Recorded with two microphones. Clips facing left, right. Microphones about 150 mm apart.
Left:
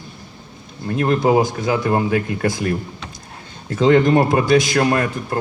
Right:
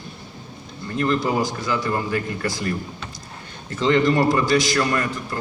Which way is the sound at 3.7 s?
55° left (ahead or behind).